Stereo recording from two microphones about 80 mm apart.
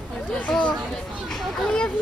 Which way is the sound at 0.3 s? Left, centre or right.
Centre.